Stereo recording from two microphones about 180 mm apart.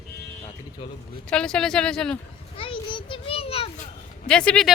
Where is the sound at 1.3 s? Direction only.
5° left (ahead or behind).